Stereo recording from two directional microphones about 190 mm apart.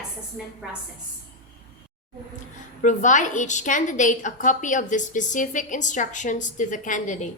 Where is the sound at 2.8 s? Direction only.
40° left (ahead or behind).